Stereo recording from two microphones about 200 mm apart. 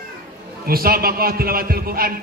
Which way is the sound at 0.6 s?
50° right (ahead or behind).